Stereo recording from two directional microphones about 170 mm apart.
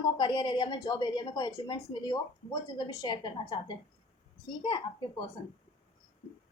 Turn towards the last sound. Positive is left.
turn(degrees=25)  # may be behind; listen again after turning